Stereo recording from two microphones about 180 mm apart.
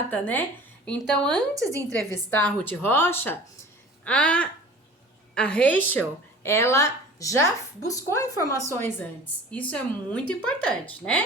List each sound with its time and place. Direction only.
0.1 s a woman's voice: 10° left (ahead or behind)
1.5 s a woman's voice: 15° right (ahead or behind)
2.3 s a woman's voice: 10° left (ahead or behind)